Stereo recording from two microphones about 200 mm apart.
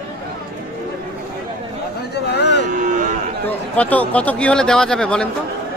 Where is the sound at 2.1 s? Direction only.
55° left (ahead or behind).